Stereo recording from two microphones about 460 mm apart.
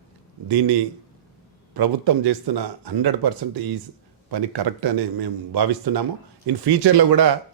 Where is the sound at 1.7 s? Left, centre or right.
Right.